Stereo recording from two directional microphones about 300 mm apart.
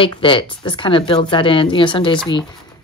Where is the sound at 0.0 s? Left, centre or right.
Centre.